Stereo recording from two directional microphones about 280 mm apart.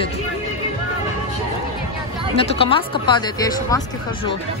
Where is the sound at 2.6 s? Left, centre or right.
Centre.